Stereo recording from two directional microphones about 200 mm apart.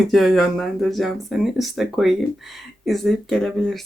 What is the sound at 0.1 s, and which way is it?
Speech, centre (ahead or behind).